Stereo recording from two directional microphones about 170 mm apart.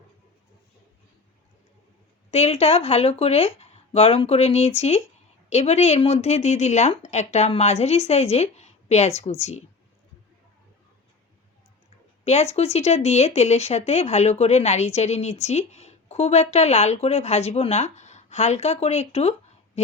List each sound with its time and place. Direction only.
2.3 s speech: 40° left (ahead or behind)
12.2 s speech: 40° left (ahead or behind)